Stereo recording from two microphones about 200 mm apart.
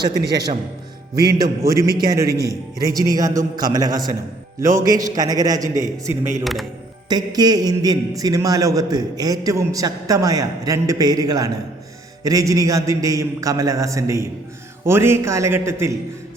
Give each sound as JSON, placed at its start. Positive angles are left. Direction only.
{"t": 0.0, "sound": "a man's voice", "side_deg": -20}
{"t": 5.8, "sound": "a man's voice", "side_deg": -35}
{"t": 6.4, "sound": "speech", "side_deg": 0}
{"t": 7.1, "sound": "a man's voice", "side_deg": -20}